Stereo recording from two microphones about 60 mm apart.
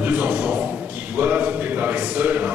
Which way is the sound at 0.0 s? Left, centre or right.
Right.